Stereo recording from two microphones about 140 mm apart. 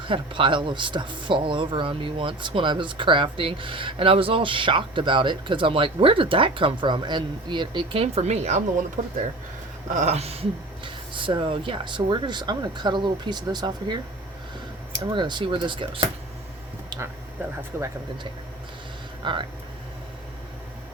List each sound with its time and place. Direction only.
0.0 s speech: 35° right (ahead or behind)
8.0 s a woman's voice: 50° right (ahead or behind)
9.9 s a woman's voice: 55° right (ahead or behind)
10.8 s speech: 35° right (ahead or behind)
15.1 s speech: 35° right (ahead or behind)
16.9 s a sound: 30° right (ahead or behind)
17.7 s speech: 15° right (ahead or behind)
19.2 s speech: 35° right (ahead or behind)